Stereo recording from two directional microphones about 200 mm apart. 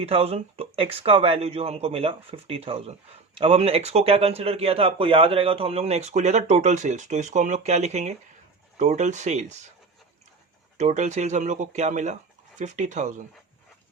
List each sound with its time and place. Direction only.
0.0 s speech: 30° right (ahead or behind)
10.8 s speech: 35° right (ahead or behind)